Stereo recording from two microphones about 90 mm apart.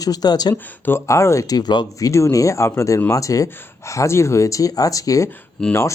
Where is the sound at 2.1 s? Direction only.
35° left (ahead or behind).